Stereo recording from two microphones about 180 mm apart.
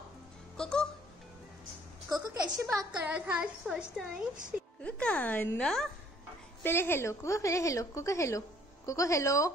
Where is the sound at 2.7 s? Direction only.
10° right (ahead or behind).